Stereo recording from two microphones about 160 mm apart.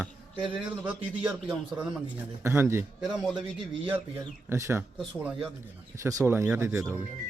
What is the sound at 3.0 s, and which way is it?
Speech, centre (ahead or behind).